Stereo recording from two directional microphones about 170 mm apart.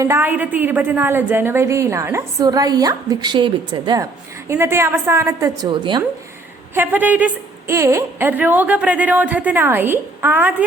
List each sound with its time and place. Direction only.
0.0 s a woman's voice: 15° right (ahead or behind)
6.7 s a woman's voice: 10° right (ahead or behind)